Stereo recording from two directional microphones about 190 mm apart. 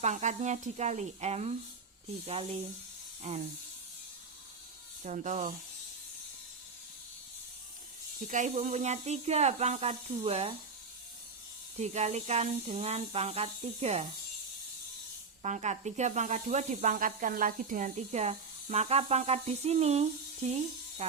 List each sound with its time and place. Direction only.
0.0 s speech: 40° right (ahead or behind)
5.0 s speech: 40° right (ahead or behind)
8.3 s speech: 40° right (ahead or behind)
11.8 s speech: 35° right (ahead or behind)
15.4 s speech: 35° right (ahead or behind)